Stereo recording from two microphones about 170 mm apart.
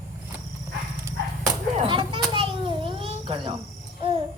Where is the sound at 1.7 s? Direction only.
30° right (ahead or behind).